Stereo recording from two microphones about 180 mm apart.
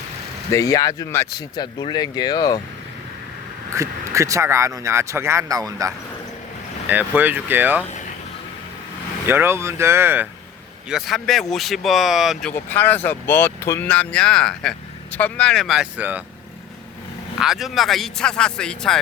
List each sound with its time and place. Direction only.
0.5 s speech: 20° left (ahead or behind)
3.8 s speech: 15° right (ahead or behind)
9.2 s speech: 15° right (ahead or behind)
10.8 s speech: centre (ahead or behind)
17.4 s speech: centre (ahead or behind)